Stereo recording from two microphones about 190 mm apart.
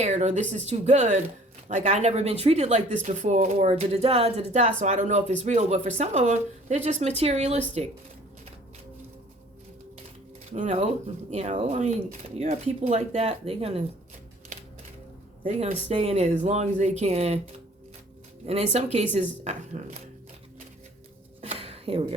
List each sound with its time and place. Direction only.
0.0 s speech: 35° right (ahead or behind)
10.5 s speech: 35° right (ahead or behind)
15.4 s speech: 35° right (ahead or behind)
18.4 s speech: 35° right (ahead or behind)
21.4 s a sound: 30° right (ahead or behind)